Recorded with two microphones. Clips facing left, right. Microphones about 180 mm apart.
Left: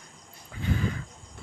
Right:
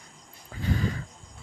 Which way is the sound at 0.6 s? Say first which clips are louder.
Right 1 dB; 35° right (ahead or behind).